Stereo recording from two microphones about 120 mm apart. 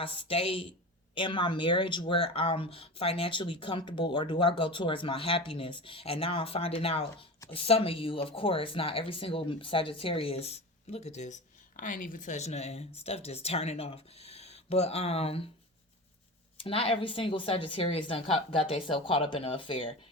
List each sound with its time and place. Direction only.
0.0 s speech: 50° left (ahead or behind)
16.6 s speech: 50° left (ahead or behind)